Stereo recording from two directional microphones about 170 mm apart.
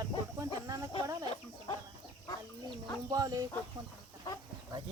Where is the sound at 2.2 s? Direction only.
25° left (ahead or behind).